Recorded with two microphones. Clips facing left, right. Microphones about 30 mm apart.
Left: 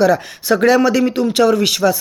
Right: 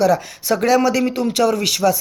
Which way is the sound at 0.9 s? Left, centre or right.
Centre.